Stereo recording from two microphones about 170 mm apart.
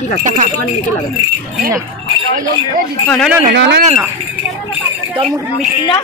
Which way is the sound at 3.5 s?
90° right.